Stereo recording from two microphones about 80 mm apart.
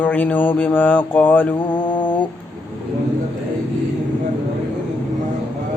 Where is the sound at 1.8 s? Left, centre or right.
Left.